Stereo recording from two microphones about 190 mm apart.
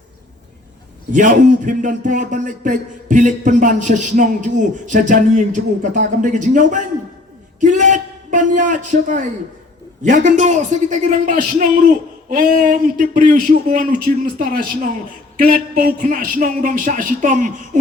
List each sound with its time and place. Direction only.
1.1 s a man's voice: 40° right (ahead or behind)